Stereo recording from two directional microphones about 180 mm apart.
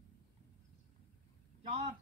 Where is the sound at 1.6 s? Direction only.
35° right (ahead or behind).